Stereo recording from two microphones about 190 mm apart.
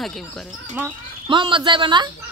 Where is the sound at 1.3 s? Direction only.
25° right (ahead or behind).